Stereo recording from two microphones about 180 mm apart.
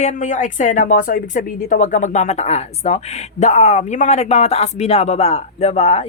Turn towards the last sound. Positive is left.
turn(degrees=35)  # may be behind; listen again after turning